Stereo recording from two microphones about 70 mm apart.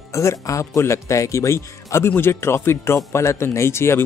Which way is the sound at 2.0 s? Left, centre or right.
Left.